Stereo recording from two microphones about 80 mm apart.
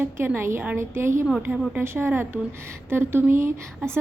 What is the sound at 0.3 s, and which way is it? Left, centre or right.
A woman's voice, right.